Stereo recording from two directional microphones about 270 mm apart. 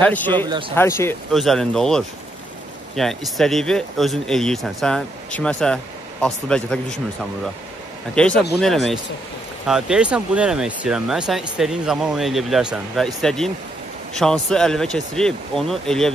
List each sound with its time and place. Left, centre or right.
0.0 s speech: centre
0.5 s speech: centre
0.7 s speech: centre
8.1 s speech: centre